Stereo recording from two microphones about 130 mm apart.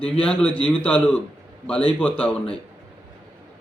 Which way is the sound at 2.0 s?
10° left (ahead or behind).